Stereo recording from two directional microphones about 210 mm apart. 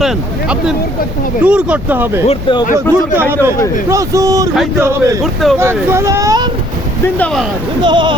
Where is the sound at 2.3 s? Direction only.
25° left (ahead or behind).